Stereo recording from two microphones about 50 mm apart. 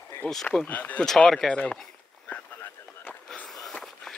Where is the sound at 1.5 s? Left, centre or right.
Left.